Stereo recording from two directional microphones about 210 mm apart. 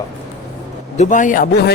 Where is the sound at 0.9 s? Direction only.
35° left (ahead or behind).